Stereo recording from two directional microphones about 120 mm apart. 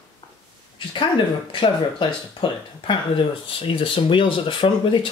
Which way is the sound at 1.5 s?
45° left (ahead or behind).